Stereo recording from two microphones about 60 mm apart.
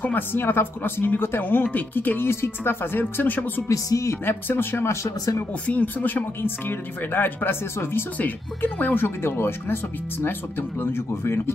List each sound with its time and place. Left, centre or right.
0.0 s speech: left
3.6 s speech: left
4.1 s speech: left
5.7 s speech: left
8.2 s speech: left
9.0 s speech: left
10.8 s speech: left